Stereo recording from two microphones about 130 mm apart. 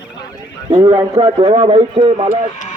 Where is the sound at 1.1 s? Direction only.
45° right (ahead or behind).